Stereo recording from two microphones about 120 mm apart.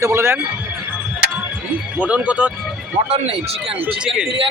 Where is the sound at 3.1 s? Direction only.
60° right (ahead or behind).